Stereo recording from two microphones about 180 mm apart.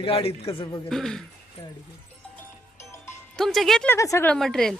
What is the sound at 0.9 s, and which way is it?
Speech, centre (ahead or behind).